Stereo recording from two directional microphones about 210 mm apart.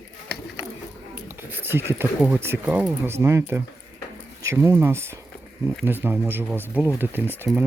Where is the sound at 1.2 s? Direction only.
10° right (ahead or behind).